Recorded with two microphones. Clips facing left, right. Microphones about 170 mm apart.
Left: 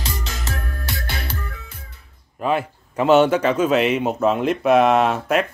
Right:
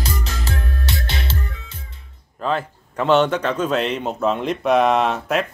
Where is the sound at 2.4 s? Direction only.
10° left (ahead or behind).